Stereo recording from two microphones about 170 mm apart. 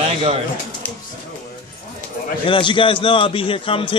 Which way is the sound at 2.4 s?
30° left (ahead or behind).